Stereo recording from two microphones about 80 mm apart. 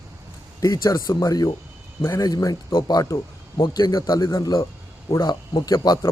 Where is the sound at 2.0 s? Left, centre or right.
Left.